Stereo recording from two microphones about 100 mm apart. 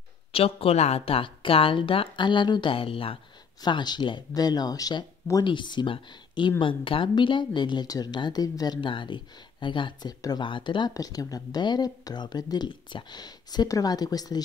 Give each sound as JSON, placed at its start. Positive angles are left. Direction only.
{"t": 0.3, "sound": "a woman's voice", "side_deg": 80}
{"t": 3.6, "sound": "speech", "side_deg": 45}
{"t": 8.8, "sound": "a woman's voice", "side_deg": 55}
{"t": 10.9, "sound": "speech", "side_deg": 35}